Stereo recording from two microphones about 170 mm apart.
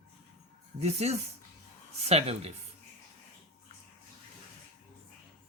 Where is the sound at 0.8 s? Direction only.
40° right (ahead or behind).